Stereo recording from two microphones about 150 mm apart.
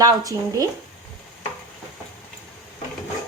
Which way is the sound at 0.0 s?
25° right (ahead or behind).